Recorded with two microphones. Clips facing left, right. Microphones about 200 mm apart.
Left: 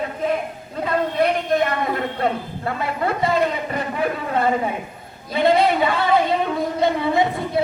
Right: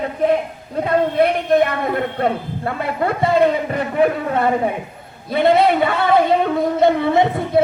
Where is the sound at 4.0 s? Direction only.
55° right (ahead or behind).